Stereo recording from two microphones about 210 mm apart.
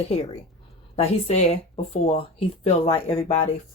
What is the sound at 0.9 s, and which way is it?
Speech, 30° left (ahead or behind).